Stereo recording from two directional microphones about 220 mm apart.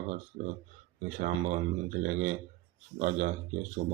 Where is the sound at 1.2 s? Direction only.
35° right (ahead or behind).